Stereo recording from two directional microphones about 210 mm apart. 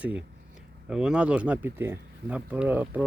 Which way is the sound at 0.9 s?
5° right (ahead or behind).